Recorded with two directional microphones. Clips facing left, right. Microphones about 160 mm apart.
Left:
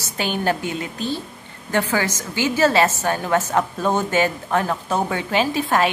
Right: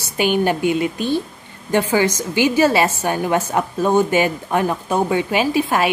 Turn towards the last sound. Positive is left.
turn(degrees=-10)  # may be behind; listen again after turning